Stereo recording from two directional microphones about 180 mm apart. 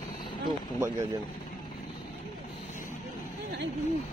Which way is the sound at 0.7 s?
15° right (ahead or behind).